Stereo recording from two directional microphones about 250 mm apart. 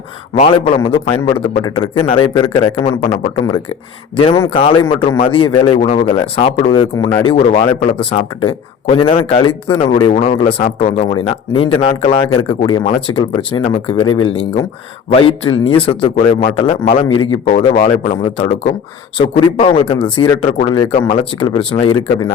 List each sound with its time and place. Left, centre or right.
0.3 s speech: left
4.2 s speech: centre